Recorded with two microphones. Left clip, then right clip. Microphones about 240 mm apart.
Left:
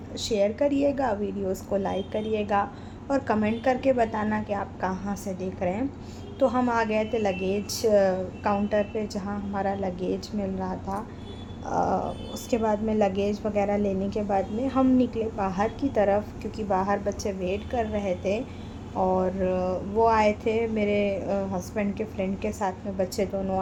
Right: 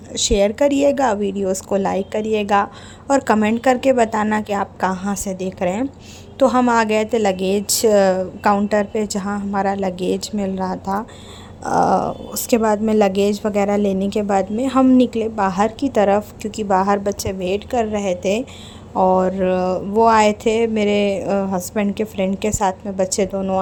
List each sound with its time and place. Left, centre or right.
0.1 s a woman's voice: right